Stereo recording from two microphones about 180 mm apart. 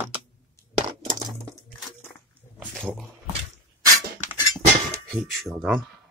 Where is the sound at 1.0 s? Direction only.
25° right (ahead or behind).